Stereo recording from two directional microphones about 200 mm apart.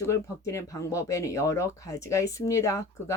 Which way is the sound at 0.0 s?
15° left (ahead or behind).